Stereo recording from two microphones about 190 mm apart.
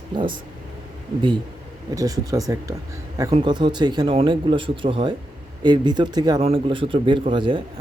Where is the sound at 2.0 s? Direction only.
15° right (ahead or behind).